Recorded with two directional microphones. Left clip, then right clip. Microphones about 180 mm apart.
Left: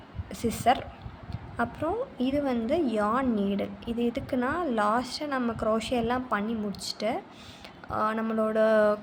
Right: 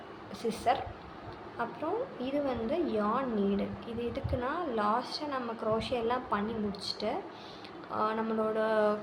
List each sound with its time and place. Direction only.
0.3 s a woman's voice: 60° left (ahead or behind)